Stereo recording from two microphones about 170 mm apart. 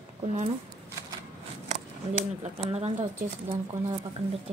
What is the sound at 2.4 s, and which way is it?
Speech, 40° right (ahead or behind).